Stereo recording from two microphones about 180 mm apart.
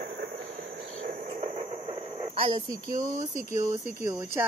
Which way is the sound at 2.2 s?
30° right (ahead or behind).